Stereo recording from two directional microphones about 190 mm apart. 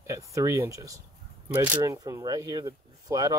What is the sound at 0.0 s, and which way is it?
Speech, 15° right (ahead or behind).